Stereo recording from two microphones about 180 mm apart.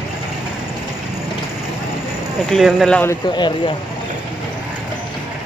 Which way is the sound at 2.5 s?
Centre (ahead or behind).